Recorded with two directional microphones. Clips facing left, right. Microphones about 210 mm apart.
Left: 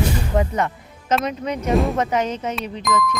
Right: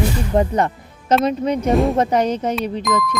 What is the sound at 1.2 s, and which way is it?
Speech, 30° right (ahead or behind).